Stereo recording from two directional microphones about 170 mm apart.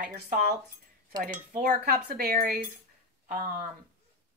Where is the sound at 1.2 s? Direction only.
50° right (ahead or behind).